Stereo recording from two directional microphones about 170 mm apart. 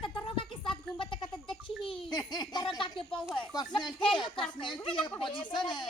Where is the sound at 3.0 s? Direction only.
5° left (ahead or behind).